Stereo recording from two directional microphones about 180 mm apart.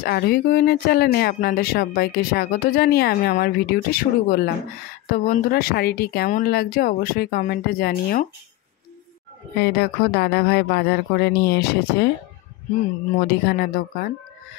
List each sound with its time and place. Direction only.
0.0 s speech: 55° left (ahead or behind)
9.6 s speech: 65° left (ahead or behind)
13.3 s speech: 60° left (ahead or behind)